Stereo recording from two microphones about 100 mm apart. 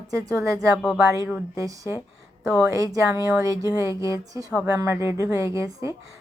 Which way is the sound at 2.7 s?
35° right (ahead or behind).